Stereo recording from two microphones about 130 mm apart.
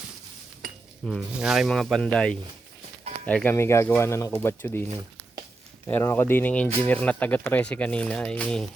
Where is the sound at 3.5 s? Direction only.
20° left (ahead or behind).